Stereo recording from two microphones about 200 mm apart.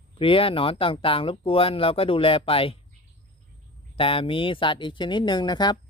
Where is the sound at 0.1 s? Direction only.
25° left (ahead or behind).